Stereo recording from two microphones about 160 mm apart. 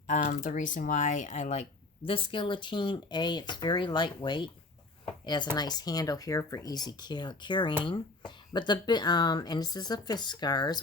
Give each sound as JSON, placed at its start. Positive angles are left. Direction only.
{"t": 0.1, "sound": "speech", "side_deg": 55}
{"t": 2.0, "sound": "speech", "side_deg": 35}